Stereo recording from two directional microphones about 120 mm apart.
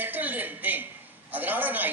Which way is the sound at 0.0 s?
15° right (ahead or behind).